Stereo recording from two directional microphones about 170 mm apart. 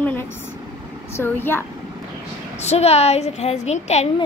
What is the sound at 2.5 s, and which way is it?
A woman's voice, 40° left (ahead or behind).